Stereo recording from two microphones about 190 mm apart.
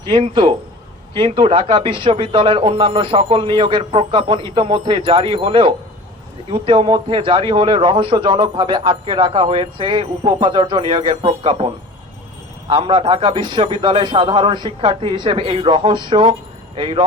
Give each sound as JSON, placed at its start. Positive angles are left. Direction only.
{"t": 0.1, "sound": "speech", "side_deg": -25}